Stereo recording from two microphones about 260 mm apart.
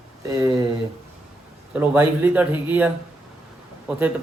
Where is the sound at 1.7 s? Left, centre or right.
Centre.